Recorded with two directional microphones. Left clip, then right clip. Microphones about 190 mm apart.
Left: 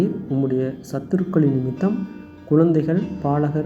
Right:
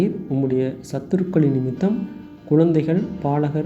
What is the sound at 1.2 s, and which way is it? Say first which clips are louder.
Speech: even; 25° right (ahead or behind).